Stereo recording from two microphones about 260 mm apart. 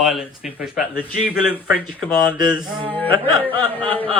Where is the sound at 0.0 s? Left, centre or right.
Centre.